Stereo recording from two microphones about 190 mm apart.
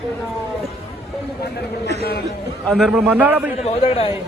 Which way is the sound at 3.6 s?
35° left (ahead or behind).